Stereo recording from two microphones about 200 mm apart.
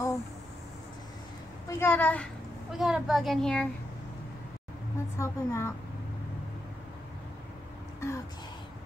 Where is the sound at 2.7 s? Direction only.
Centre (ahead or behind).